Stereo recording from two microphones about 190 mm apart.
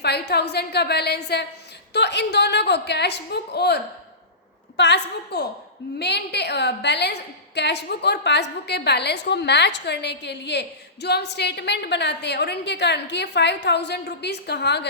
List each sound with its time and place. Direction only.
0.0 s a woman's voice: 60° left (ahead or behind)
4.8 s a woman's voice: 65° left (ahead or behind)